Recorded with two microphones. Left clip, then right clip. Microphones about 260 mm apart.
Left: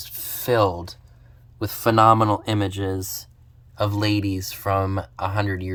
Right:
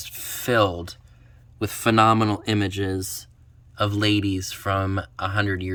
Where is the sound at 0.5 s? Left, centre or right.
Right.